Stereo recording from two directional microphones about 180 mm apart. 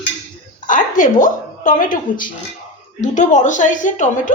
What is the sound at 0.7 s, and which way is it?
A woman's voice, 45° left (ahead or behind).